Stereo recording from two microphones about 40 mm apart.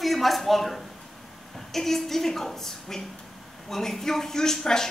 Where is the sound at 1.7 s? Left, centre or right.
Centre.